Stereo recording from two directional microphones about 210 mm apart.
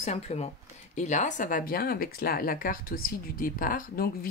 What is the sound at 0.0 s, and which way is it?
A woman's voice, 30° left (ahead or behind).